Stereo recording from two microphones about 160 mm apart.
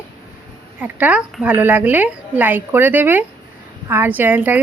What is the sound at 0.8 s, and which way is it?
A woman's voice, 10° right (ahead or behind).